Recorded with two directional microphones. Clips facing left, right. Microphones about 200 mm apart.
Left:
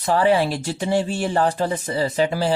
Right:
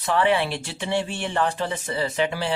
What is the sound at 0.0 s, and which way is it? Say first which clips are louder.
Speech: left 4 dB; 40° left (ahead or behind).